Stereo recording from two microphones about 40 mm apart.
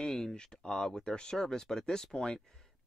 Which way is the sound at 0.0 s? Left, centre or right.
Centre.